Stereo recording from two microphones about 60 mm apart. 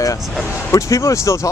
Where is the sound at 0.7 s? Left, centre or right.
Left.